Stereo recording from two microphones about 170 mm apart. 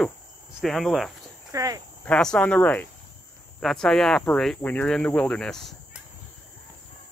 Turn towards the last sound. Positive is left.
turn(degrees=5)  # may be behind; listen again after turning